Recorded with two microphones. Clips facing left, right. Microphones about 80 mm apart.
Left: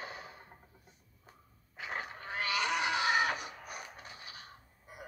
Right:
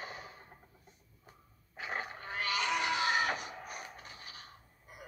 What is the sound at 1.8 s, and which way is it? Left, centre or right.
Fowl, right.